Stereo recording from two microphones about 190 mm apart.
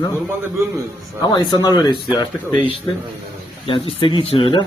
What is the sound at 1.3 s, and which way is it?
Speech, 25° left (ahead or behind).